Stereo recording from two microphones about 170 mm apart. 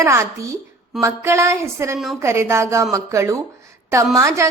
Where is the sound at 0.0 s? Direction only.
15° right (ahead or behind).